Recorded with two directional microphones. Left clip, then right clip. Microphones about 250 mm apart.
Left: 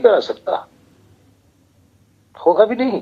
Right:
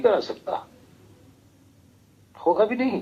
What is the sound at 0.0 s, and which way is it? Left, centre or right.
Speech, left.